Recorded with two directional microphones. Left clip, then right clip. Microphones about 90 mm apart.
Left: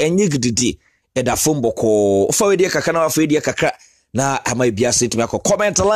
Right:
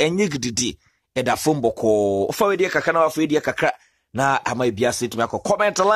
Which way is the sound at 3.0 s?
30° left (ahead or behind).